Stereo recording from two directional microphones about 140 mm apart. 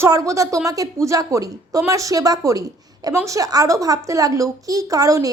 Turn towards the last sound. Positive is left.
turn(degrees=-25)  # may be behind; listen again after turning